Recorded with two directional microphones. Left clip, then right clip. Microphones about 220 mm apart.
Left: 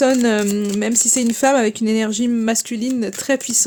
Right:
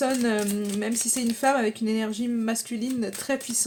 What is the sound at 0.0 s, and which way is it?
Speech, 40° left (ahead or behind).